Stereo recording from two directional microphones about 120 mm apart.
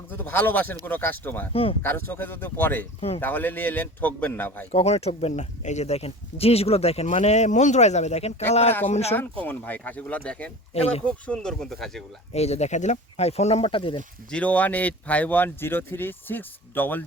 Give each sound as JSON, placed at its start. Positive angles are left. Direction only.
{"t": 0.1, "sound": "speech", "side_deg": 15}
{"t": 4.7, "sound": "speech", "side_deg": 60}
{"t": 9.1, "sound": "speech", "side_deg": 15}
{"t": 10.8, "sound": "speech", "side_deg": 60}
{"t": 11.0, "sound": "speech", "side_deg": 5}
{"t": 12.3, "sound": "speech", "side_deg": 65}
{"t": 14.3, "sound": "speech", "side_deg": 10}